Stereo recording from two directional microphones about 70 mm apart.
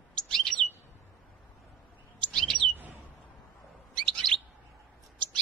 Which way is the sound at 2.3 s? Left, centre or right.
Centre.